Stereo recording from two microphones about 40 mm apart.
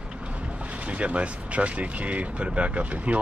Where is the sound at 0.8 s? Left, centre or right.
Right.